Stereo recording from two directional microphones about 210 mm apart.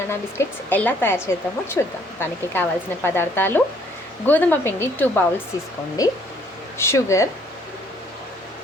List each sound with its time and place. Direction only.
0.1 s speech: 10° left (ahead or behind)